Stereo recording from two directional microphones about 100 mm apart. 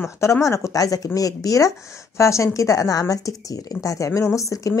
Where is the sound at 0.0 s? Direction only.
30° left (ahead or behind).